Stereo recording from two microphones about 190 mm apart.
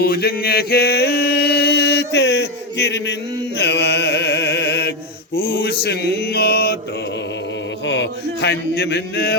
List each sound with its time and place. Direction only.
0.0 s mantra: 55° left (ahead or behind)
5.8 s speech: 60° left (ahead or behind)
7.9 s speech: 65° left (ahead or behind)